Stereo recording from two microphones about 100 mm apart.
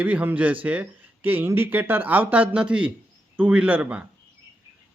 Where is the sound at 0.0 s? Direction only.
15° right (ahead or behind).